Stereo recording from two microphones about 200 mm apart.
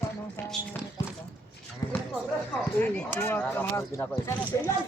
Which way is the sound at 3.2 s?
10° left (ahead or behind).